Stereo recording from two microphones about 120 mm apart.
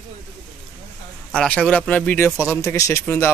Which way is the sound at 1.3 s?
5° left (ahead or behind).